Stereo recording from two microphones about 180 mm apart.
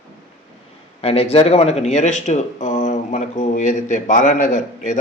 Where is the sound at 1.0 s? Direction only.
35° left (ahead or behind).